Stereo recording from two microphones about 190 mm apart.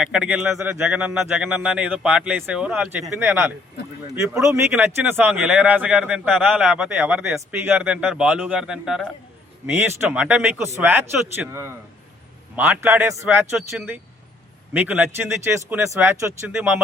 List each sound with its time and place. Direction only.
0.0 s speech: 5° right (ahead or behind)